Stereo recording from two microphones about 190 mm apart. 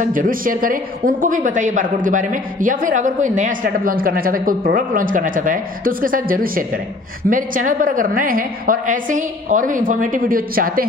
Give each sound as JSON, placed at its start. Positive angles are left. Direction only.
{"t": 0.0, "sound": "a woman's voice", "side_deg": -45}